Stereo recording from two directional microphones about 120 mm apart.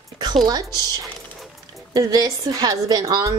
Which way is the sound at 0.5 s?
35° right (ahead or behind).